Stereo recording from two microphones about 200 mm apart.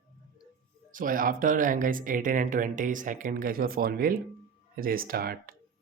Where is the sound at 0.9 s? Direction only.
45° right (ahead or behind).